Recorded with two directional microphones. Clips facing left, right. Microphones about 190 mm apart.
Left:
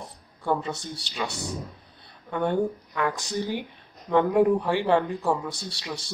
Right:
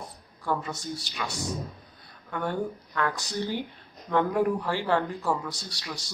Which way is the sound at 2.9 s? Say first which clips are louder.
Left 2 dB; 15° left (ahead or behind).